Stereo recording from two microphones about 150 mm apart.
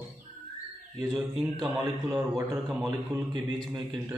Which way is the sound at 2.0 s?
20° right (ahead or behind).